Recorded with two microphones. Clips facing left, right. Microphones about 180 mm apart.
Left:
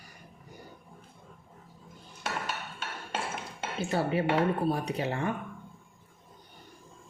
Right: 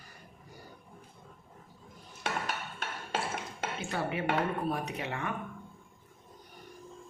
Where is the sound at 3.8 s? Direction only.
35° left (ahead or behind).